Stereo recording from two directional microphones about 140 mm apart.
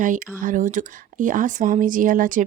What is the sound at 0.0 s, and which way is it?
A woman's voice, 70° right (ahead or behind).